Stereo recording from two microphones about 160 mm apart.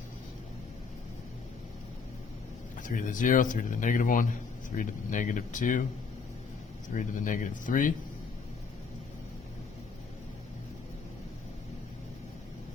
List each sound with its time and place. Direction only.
2.7 s speech: 55° left (ahead or behind)
6.9 s speech: 55° left (ahead or behind)